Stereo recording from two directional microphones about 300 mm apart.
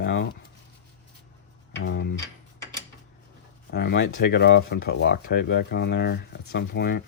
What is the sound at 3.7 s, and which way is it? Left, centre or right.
Speech, left.